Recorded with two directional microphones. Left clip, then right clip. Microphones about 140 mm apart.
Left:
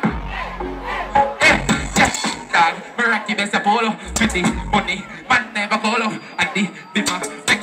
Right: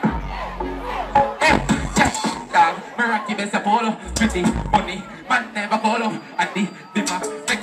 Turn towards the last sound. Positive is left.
turn(degrees=25)  # may be behind; listen again after turning